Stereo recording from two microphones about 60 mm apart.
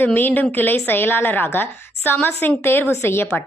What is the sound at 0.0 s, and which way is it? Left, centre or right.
A woman's voice, left.